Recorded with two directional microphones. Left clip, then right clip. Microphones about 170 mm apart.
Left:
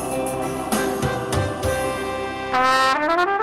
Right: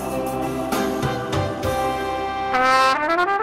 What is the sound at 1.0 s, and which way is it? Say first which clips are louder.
Music: even; 55° left (ahead or behind).